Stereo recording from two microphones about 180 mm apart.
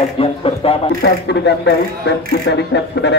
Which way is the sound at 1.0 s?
70° left (ahead or behind).